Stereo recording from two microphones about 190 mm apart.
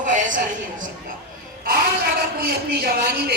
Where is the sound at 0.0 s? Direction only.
40° right (ahead or behind).